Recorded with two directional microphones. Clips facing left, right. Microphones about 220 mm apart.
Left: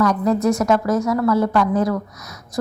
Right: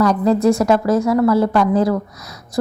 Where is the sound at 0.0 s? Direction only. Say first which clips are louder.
Right 3 dB; 30° right (ahead or behind).